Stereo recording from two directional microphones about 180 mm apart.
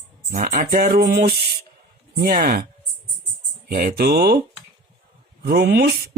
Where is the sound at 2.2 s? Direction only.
55° right (ahead or behind).